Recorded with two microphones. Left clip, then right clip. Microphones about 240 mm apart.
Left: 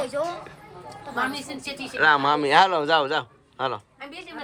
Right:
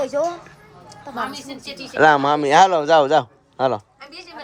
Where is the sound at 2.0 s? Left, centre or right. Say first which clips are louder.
Right 5 dB; right.